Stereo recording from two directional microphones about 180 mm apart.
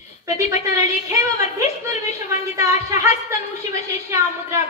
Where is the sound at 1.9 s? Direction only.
15° right (ahead or behind).